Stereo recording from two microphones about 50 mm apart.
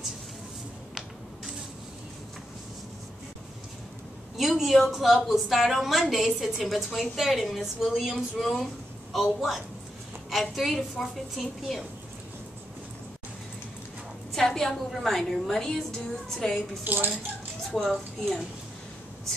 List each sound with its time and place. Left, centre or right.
4.4 s a woman's voice: centre
14.3 s a woman's voice: centre
16.8 s a woman's voice: right
17.7 s a woman's voice: centre